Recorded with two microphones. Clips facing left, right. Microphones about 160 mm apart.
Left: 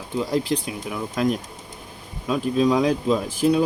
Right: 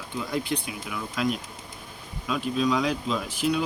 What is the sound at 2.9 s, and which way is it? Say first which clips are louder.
Speech: left 7 dB; 30° left (ahead or behind).